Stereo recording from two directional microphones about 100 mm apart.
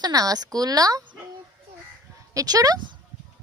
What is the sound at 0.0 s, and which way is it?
A woman's voice, 35° right (ahead or behind).